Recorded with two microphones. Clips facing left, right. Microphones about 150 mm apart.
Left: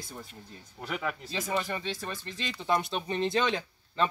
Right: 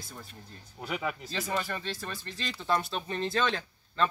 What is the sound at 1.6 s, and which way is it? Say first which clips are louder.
Speech: left 2 dB; 15° left (ahead or behind).